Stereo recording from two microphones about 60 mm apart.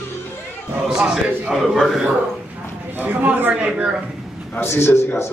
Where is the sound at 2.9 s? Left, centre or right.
Right.